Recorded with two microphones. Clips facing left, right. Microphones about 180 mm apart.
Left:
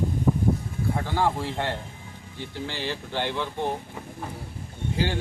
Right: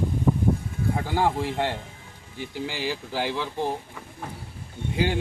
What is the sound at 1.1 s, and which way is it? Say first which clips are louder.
Speech: right 2 dB; 15° right (ahead or behind).